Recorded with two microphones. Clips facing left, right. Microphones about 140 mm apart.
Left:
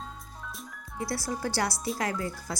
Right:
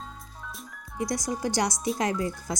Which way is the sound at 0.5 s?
Centre (ahead or behind).